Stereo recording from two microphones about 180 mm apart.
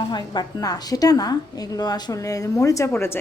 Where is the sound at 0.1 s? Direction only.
25° left (ahead or behind).